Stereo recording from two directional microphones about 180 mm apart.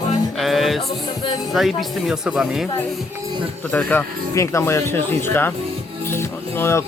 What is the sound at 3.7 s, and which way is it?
Speech, 10° left (ahead or behind).